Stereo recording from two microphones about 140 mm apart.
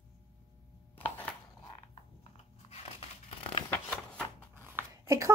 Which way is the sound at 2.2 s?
50° left (ahead or behind).